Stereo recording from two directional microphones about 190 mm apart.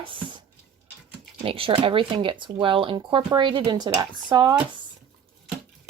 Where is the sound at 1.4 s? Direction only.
30° right (ahead or behind).